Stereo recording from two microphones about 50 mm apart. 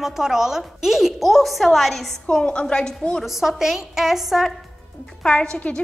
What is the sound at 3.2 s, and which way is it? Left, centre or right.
Speech, centre.